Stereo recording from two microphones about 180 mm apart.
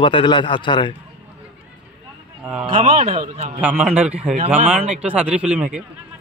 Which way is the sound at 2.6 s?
30° right (ahead or behind).